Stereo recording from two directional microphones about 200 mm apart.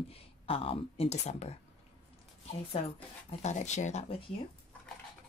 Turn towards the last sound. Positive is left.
turn(degrees=35)  # may be behind; listen again after turning